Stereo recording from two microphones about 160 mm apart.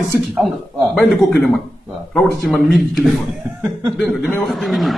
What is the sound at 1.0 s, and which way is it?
Speech, centre (ahead or behind).